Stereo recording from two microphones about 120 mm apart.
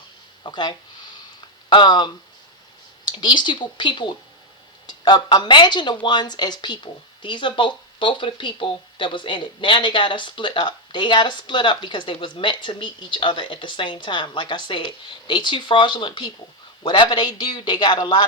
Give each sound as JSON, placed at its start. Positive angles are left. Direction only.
{"t": 0.4, "sound": "speech", "side_deg": 40}
{"t": 3.1, "sound": "speech", "side_deg": 40}